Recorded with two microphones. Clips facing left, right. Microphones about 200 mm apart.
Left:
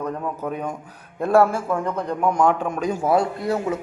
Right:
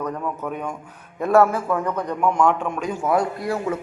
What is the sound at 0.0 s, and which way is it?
A man's voice, 35° left (ahead or behind).